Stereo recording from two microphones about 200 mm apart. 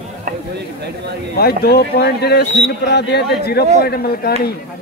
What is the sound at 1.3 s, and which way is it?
A man's voice, 50° left (ahead or behind).